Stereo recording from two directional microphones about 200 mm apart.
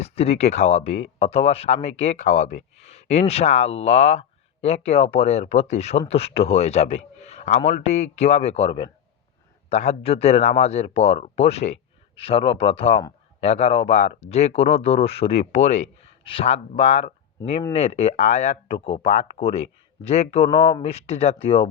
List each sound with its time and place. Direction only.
0.0 s speech: 30° left (ahead or behind)